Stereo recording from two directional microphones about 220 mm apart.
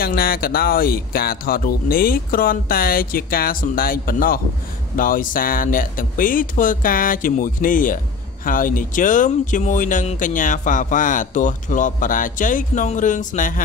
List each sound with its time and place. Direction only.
0.0 s speech: 45° left (ahead or behind)